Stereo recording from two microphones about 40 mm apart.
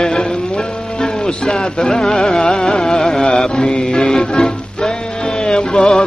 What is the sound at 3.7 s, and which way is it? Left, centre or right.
Music, left.